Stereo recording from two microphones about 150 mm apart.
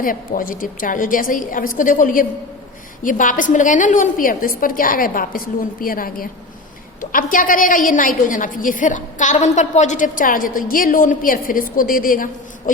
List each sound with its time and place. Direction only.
0.0 s a woman's voice: 65° left (ahead or behind)